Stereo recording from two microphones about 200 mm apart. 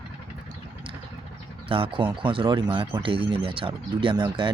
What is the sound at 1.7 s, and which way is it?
Speech, 25° right (ahead or behind).